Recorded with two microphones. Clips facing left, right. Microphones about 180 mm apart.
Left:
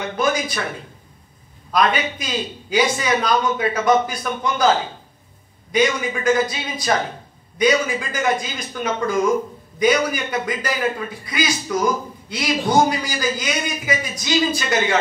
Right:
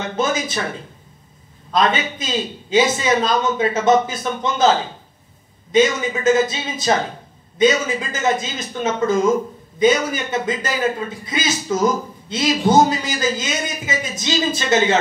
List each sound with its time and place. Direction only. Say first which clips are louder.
0.2 s speech: even; 25° right (ahead or behind)
1.7 s a man's voice: right 1 dB; 25° right (ahead or behind)